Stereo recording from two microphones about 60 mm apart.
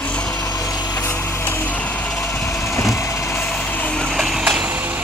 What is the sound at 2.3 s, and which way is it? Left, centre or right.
Vehicle, left.